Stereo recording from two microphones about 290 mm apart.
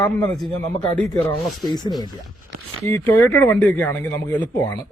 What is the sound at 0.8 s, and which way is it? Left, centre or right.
Speech, centre.